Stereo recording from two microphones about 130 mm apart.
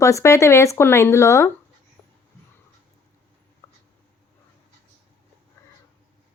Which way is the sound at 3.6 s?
25° left (ahead or behind).